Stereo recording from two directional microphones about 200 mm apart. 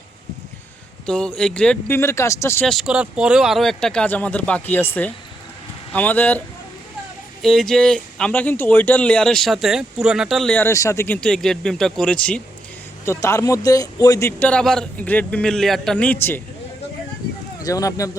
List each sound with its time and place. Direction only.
1.0 s a man's voice: 5° left (ahead or behind)
2.6 s speech: centre (ahead or behind)
5.9 s a man's voice: 10° left (ahead or behind)
7.4 s a man's voice: centre (ahead or behind)
17.6 s a man's voice: 15° left (ahead or behind)